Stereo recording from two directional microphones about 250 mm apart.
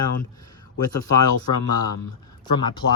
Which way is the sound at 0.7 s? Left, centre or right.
Left.